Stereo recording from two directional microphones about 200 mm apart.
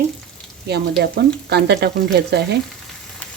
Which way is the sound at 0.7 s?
55° right (ahead or behind).